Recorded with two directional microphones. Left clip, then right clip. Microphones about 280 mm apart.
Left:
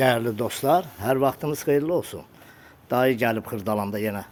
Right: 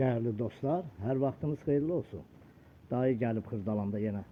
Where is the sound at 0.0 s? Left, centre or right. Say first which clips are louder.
Left 11 dB; centre.